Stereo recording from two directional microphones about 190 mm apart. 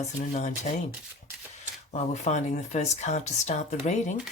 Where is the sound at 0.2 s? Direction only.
35° left (ahead or behind).